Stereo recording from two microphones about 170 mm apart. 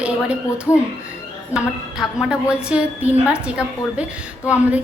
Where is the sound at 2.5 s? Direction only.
5° right (ahead or behind).